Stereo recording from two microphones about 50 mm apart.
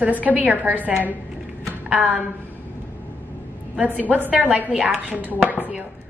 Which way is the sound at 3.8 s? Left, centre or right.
Right.